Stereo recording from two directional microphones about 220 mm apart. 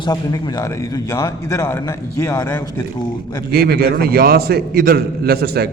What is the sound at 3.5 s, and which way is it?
A man's voice, 45° right (ahead or behind).